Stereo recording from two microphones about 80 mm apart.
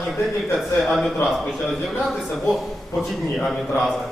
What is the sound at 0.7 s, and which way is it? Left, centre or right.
A man's voice, centre.